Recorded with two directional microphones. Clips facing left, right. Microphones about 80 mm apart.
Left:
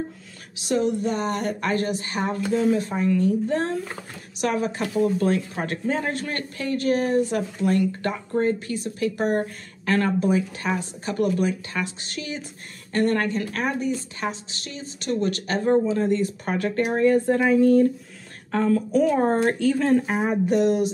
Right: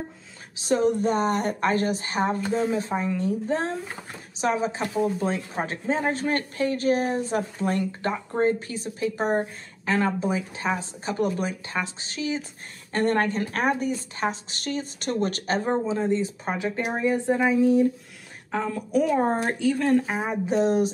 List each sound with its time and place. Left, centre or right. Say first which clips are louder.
0.6 s a woman's voice: right 1 dB; right
9.4 s speech: left 1 dB; centre
12.9 s speech: left 1 dB; right; by 20.3 s centre
20.4 s a woman's voice: even; right